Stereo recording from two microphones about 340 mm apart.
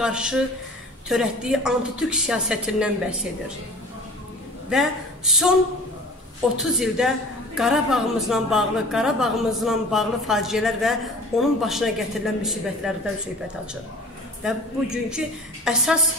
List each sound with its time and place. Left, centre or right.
0.0 s a woman's voice: centre
4.6 s a man's voice: centre
14.4 s a woman's voice: centre